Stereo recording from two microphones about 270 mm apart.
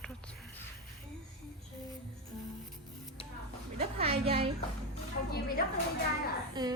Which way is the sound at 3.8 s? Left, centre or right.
Right.